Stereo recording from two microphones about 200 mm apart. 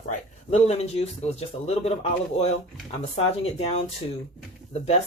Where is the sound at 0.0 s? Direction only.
35° left (ahead or behind).